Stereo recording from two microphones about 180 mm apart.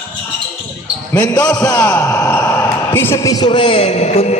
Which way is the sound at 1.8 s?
15° left (ahead or behind).